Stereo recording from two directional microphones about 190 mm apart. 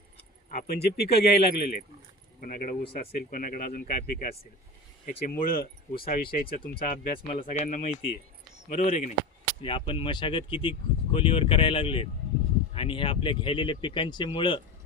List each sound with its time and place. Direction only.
0.5 s a man's voice: 55° left (ahead or behind)
9.6 s speech: 25° left (ahead or behind)